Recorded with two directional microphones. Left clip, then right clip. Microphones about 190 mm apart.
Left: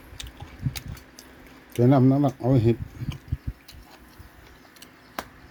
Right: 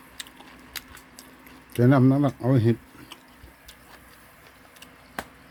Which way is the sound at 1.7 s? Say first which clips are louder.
Even; 10° right (ahead or behind).